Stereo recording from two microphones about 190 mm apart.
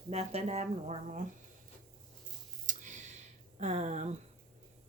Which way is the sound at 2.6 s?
40° right (ahead or behind).